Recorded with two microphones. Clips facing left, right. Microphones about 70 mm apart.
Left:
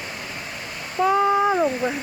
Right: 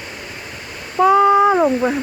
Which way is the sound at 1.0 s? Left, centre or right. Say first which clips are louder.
Right 7 dB; right.